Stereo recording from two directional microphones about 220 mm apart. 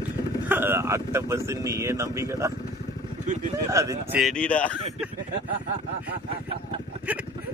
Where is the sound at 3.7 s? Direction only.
15° right (ahead or behind).